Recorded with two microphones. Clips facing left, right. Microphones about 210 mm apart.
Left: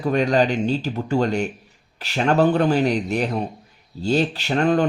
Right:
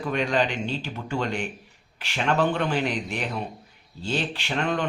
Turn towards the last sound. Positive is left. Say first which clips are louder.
# left 8 dB
turn(degrees=40)  # may be behind; listen again after turning